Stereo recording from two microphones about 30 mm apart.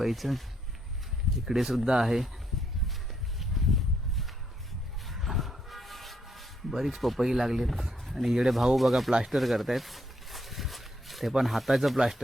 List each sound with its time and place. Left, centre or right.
0.0 s speech: centre
1.5 s speech: centre
1.8 s speech: centre
3.3 s a sound: centre
5.1 s rub: centre
7.2 s speech: centre
8.5 s speech: centre
9.2 s a sound: centre
11.4 s speech: centre